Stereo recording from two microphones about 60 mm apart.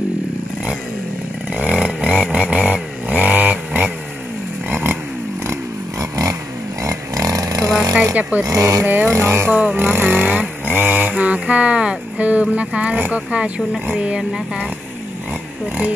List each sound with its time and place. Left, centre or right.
1.5 s chainsaw: centre
4.6 s a sound: right
5.5 s vehicle: right
6.8 s a sound: right
8.0 s a sound: right
8.5 s speech: right
8.8 s music: right
9.1 s speech: right
9.5 s speech: right
9.8 s vehicle: right; by 14.6 s centre